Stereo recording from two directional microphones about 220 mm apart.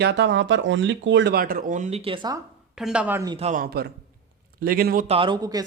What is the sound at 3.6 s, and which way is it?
A man's voice, 45° right (ahead or behind).